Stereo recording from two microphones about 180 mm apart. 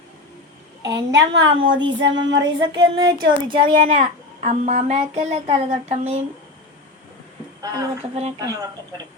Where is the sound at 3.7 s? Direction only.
45° right (ahead or behind).